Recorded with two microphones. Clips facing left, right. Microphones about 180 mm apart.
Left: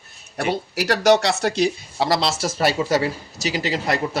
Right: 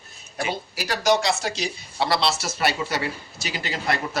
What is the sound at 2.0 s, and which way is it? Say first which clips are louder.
Speech: left 3 dB; 40° left (ahead or behind).